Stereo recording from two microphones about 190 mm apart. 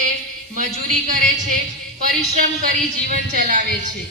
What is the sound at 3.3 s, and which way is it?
Speech, 45° right (ahead or behind).